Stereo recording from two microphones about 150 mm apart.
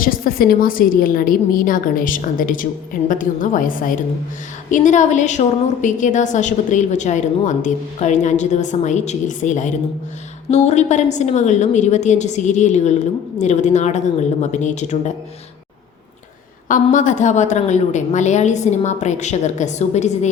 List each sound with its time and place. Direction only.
0.0 s a woman's voice: 75° left (ahead or behind)
4.7 s a woman's voice: 55° left (ahead or behind)
16.6 s a woman's voice: 60° left (ahead or behind)